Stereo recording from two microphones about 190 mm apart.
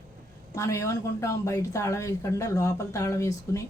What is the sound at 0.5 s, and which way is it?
A woman's voice, 15° left (ahead or behind).